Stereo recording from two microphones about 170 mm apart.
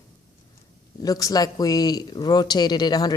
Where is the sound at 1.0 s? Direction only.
20° left (ahead or behind).